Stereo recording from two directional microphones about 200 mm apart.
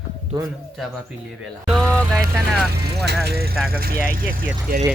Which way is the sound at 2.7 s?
55° right (ahead or behind).